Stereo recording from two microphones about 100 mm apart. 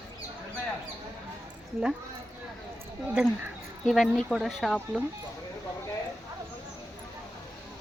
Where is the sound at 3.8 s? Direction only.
Centre (ahead or behind).